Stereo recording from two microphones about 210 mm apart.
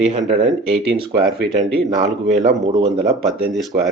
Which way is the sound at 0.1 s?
35° right (ahead or behind).